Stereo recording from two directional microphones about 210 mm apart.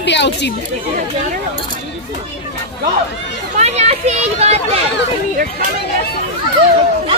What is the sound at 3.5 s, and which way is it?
A child's voice, 35° right (ahead or behind).